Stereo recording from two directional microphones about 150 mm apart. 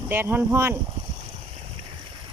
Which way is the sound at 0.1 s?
15° right (ahead or behind).